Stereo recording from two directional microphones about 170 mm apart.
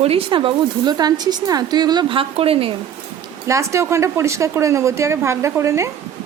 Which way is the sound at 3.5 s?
15° right (ahead or behind).